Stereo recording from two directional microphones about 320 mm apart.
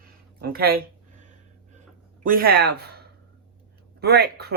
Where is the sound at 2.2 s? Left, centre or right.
Right.